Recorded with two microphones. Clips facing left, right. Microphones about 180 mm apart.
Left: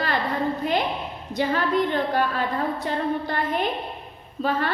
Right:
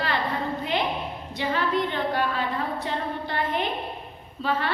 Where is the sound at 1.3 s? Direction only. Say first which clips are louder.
Left 3 dB; 45° left (ahead or behind).